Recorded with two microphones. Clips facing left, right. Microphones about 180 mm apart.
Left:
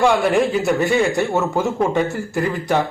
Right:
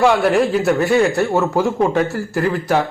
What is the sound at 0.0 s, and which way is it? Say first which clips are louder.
A man's voice: right 2 dB; centre (ahead or behind).